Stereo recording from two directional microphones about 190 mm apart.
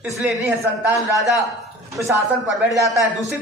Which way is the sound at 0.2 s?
5° right (ahead or behind).